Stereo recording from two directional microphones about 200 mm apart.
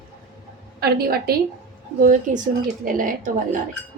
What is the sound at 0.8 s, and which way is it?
A woman's voice, 50° right (ahead or behind).